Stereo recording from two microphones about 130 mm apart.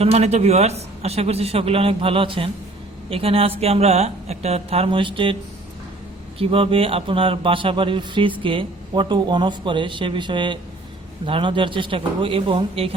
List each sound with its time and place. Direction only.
0.0 s a man's voice: 55° right (ahead or behind)
6.4 s a man's voice: 45° right (ahead or behind)